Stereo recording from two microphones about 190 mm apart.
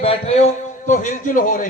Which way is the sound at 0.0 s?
30° left (ahead or behind).